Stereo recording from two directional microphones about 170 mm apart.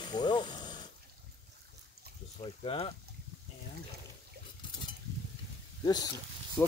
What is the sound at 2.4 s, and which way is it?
Speech, 30° left (ahead or behind).